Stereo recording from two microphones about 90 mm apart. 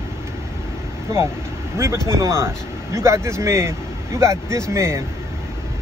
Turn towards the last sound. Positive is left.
turn(degrees=-35)  # may be behind; listen again after turning